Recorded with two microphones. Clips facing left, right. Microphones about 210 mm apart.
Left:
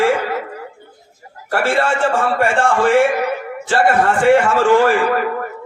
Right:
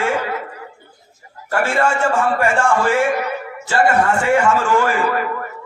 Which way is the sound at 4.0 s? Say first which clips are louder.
Left 3 dB; 30° left (ahead or behind).